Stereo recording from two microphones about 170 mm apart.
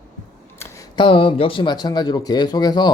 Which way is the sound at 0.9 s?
30° left (ahead or behind).